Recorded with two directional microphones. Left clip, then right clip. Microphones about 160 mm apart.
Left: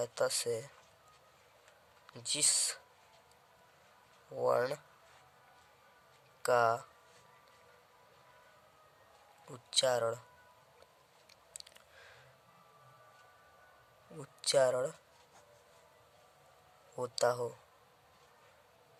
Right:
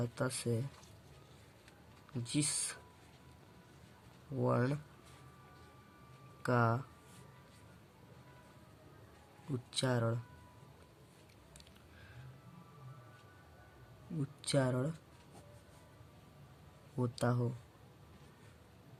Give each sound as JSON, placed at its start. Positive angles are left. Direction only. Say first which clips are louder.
{"t": 0.0, "sound": "speech", "louder": "left 5 dB", "side_deg": 40}
{"t": 2.2, "sound": "speech", "louder": "left 5 dB", "side_deg": 40}
{"t": 4.4, "sound": "speech", "louder": "left 4 dB", "side_deg": 35}
{"t": 6.4, "sound": "speech", "louder": "left 5 dB", "side_deg": 40}
{"t": 9.6, "sound": "speech", "louder": "left 6 dB", "side_deg": 40}
{"t": 14.4, "sound": "speech", "louder": "left 7 dB", "side_deg": 40}
{"t": 17.0, "sound": "speech", "louder": "left 5 dB", "side_deg": 45}